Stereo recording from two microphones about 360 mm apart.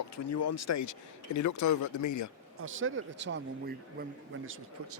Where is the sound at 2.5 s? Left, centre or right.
Right.